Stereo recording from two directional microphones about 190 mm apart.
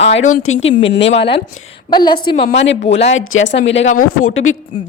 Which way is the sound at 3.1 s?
85° left.